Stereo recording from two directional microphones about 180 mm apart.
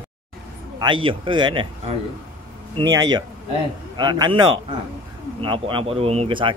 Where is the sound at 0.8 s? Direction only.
25° right (ahead or behind).